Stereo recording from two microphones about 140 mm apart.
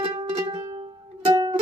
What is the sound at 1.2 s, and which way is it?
Music, 35° right (ahead or behind).